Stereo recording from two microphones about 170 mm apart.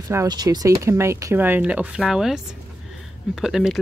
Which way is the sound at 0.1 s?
20° right (ahead or behind).